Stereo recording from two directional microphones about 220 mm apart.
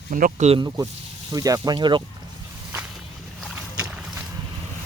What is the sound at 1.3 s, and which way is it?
Speech, 15° right (ahead or behind).